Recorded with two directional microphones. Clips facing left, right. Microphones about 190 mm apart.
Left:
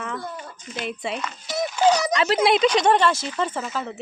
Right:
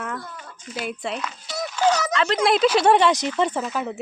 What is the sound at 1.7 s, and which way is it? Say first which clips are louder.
Speech: left 1 dB; 15° left (ahead or behind).